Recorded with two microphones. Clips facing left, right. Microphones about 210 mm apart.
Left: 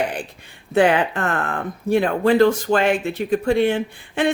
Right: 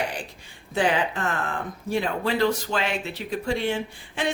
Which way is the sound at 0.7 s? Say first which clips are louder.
Left 7 dB; 60° left (ahead or behind).